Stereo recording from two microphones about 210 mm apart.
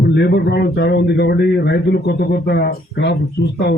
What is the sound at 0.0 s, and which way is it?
Speech, 50° left (ahead or behind).